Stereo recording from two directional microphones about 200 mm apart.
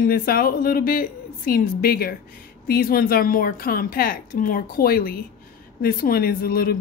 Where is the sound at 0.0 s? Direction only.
45° left (ahead or behind).